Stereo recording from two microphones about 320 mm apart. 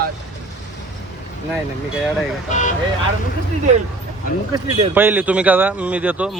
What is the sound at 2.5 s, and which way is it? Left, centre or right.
Speech, left.